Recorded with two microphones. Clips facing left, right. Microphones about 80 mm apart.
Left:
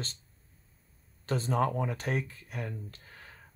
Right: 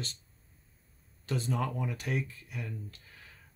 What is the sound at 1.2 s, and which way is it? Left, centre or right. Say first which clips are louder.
Speech: left 4 dB; left.